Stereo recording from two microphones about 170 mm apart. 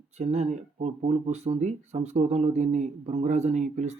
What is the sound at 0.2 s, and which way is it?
Speech, 40° right (ahead or behind).